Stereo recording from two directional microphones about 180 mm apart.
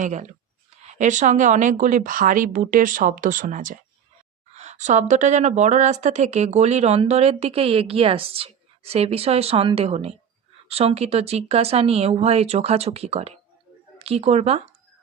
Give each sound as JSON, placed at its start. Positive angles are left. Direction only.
{"t": 0.0, "sound": "a woman's voice", "side_deg": -40}